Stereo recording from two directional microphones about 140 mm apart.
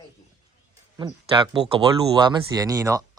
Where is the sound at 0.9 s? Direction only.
35° right (ahead or behind).